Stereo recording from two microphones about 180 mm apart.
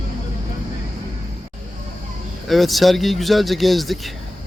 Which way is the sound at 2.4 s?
Centre (ahead or behind).